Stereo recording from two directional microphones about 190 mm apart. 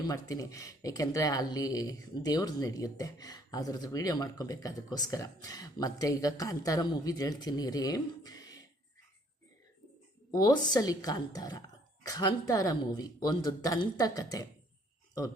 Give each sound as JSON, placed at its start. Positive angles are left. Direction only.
{"t": 0.1, "sound": "speech", "side_deg": 20}
{"t": 10.3, "sound": "speech", "side_deg": 20}